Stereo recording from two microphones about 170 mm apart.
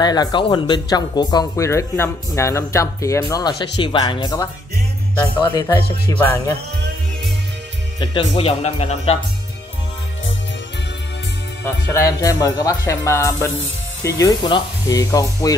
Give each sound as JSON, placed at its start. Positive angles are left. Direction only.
{"t": 0.0, "sound": "speech", "side_deg": 25}
{"t": 8.0, "sound": "speech", "side_deg": 30}
{"t": 11.6, "sound": "speech", "side_deg": 15}